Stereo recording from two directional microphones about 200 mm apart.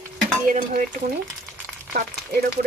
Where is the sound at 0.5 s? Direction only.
40° right (ahead or behind).